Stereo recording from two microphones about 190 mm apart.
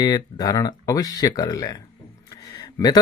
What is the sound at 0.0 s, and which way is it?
Speech, 20° left (ahead or behind).